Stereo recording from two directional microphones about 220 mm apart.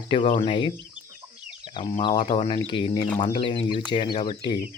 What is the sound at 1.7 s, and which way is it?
Speech, 25° left (ahead or behind).